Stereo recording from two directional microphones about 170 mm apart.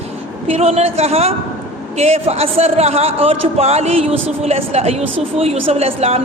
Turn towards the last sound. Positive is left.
turn(degrees=-35)  # may be behind; listen again after turning